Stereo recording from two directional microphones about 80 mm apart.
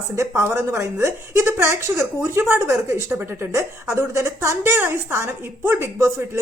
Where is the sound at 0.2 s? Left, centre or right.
Right.